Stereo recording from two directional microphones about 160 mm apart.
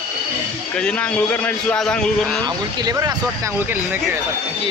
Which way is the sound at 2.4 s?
25° right (ahead or behind).